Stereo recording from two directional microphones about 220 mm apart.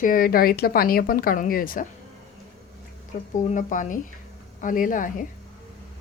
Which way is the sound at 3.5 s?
35° left (ahead or behind).